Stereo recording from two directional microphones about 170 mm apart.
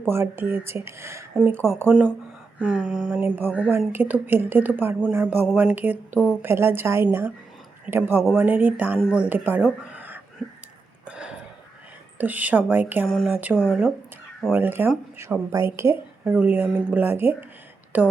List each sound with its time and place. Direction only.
0.1 s a woman's voice: 15° right (ahead or behind)
9.9 s a sound: 10° right (ahead or behind)
12.1 s a woman's voice: 10° right (ahead or behind)
13.1 s speech: centre (ahead or behind)
13.3 s a woman's voice: 10° right (ahead or behind)